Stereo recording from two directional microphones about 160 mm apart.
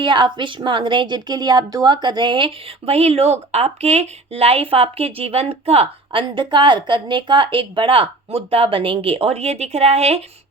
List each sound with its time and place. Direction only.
0.0 s a woman's voice: 30° right (ahead or behind)